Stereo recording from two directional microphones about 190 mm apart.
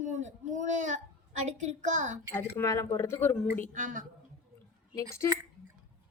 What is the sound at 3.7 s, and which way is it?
Speech, 45° right (ahead or behind).